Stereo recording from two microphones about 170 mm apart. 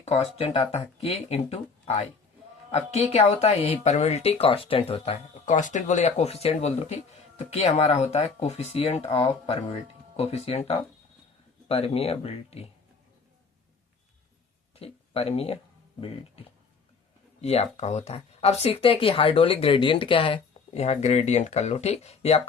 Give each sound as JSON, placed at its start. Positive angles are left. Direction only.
{"t": 0.0, "sound": "speech", "side_deg": 40}
{"t": 14.8, "sound": "speech", "side_deg": 35}